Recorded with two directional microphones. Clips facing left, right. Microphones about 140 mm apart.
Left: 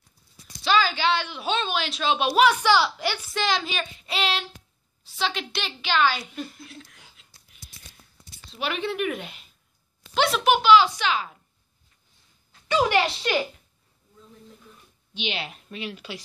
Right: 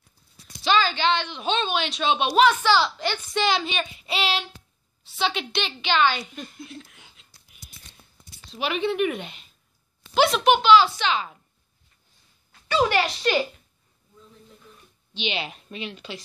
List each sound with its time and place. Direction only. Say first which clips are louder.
0.7 s a woman's voice: right 1 dB; 10° left (ahead or behind)
3.4 s a woman's voice: right 1 dB; centre (ahead or behind)
8.5 s speech: right 3 dB; centre (ahead or behind)
12.6 s speech: even; 20° left (ahead or behind)
15.1 s speech: right 2 dB; centre (ahead or behind)